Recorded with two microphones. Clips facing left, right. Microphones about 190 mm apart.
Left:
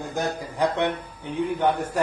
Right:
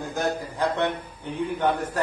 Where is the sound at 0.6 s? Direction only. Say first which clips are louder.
Left 3 dB; 15° left (ahead or behind).